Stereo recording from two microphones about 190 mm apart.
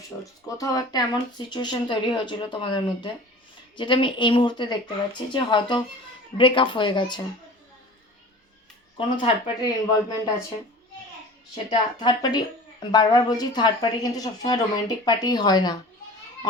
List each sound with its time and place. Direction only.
0.4 s speech: 20° left (ahead or behind)
9.0 s speech: 25° left (ahead or behind)
11.5 s speech: 20° left (ahead or behind)